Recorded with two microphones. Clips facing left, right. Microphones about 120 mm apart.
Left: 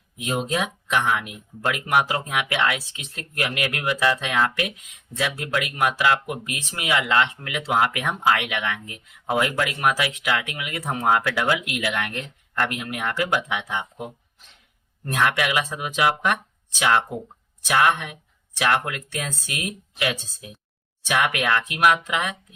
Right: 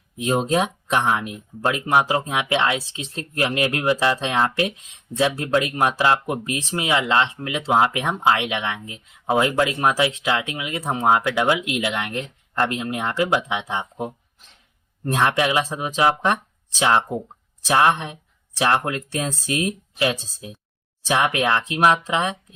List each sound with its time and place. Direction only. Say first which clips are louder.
0.2 s speech: right 5 dB; 35° right (ahead or behind)